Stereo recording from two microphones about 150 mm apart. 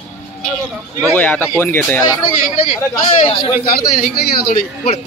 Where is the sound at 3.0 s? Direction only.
40° left (ahead or behind).